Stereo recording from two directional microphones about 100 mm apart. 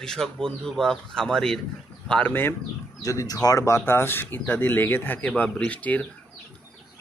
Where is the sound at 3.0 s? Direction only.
35° left (ahead or behind); by 6.1 s 15° left (ahead or behind).